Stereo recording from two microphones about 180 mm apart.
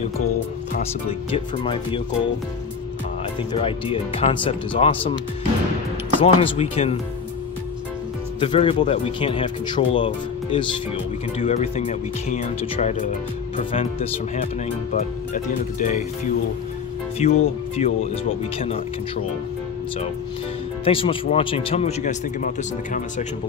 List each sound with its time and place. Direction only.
1.0 s speech: 30° left (ahead or behind)
3.5 s speech: 30° left (ahead or behind)
6.2 s speech: 35° left (ahead or behind)
8.4 s speech: 30° left (ahead or behind)
14.4 s speech: 45° left (ahead or behind)
17.2 s speech: 35° left (ahead or behind)
20.8 s speech: 30° left (ahead or behind)